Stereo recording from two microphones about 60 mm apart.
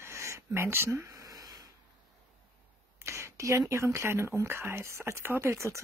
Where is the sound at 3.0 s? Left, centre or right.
Right.